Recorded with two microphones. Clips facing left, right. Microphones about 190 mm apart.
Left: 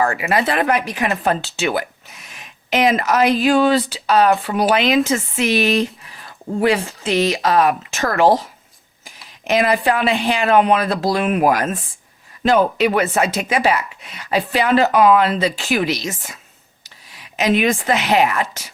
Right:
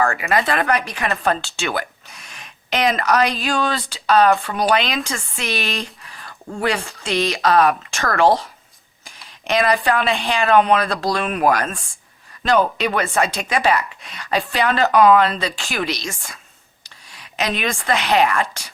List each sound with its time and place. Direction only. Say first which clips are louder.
0.0 s speech: left 1 dB; 15° left (ahead or behind)
1.0 s speech: left 1 dB; 15° left (ahead or behind)
1.5 s a sound: left 4 dB; 5° left (ahead or behind)
3.1 s speech: left 4 dB; 5° left (ahead or behind)
6.2 s a sound: left 5 dB; 5° left (ahead or behind)
7.0 s a woman's voice: even; 5° left (ahead or behind)